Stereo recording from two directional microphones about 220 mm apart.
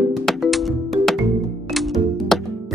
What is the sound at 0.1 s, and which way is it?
Music, centre (ahead or behind).